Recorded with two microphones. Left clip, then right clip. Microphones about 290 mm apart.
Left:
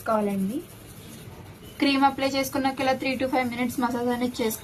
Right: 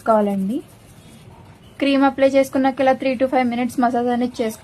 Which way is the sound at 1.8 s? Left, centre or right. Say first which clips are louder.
Right 6 dB; centre.